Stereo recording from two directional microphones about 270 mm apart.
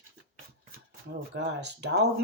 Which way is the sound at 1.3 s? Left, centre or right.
Right.